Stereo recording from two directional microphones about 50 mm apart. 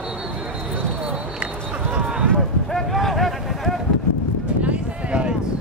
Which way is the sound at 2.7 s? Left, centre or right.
Centre.